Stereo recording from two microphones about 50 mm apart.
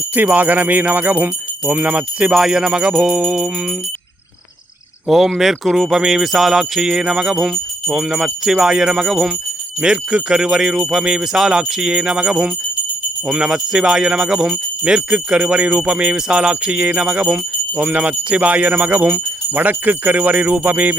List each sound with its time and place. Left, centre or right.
0.1 s jingle bell: right
2.3 s jingle bell: centre
5.0 s speech: centre
6.1 s jingle bell: centre
13.2 s speech: centre